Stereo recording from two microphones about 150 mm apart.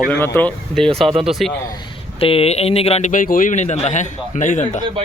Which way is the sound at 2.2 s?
40° left (ahead or behind).